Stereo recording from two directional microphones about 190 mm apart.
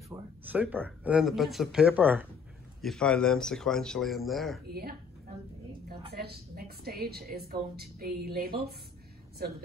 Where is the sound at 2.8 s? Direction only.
5° left (ahead or behind).